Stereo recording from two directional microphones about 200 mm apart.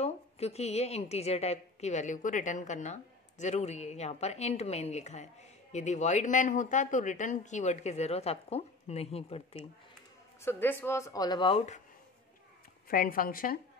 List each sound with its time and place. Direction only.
0.0 s a woman's voice: 30° left (ahead or behind)
10.4 s speech: 10° left (ahead or behind); by 11.8 s 30° left (ahead or behind)
12.8 s a woman's voice: 45° left (ahead or behind)